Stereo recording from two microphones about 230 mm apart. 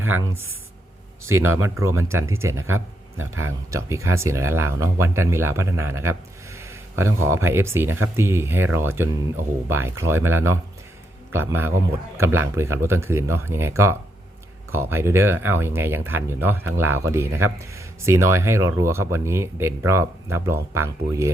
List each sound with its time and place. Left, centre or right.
0.0 s speech: centre
1.3 s speech: right
1.8 s speech: centre